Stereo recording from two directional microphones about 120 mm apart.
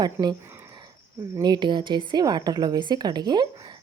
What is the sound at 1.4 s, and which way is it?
A woman's voice, 35° right (ahead or behind).